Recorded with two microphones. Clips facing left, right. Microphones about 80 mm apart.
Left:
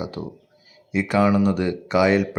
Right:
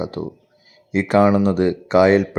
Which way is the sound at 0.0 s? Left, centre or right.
Right.